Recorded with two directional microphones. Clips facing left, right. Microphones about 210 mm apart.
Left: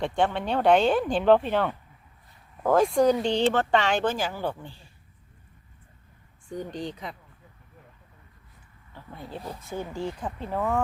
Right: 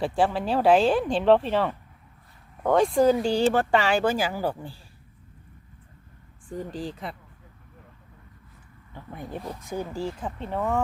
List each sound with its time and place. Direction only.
0.0 s speech: 5° right (ahead or behind)
6.5 s speech: 5° right (ahead or behind)
8.9 s speech: 15° right (ahead or behind); by 10.8 s centre (ahead or behind)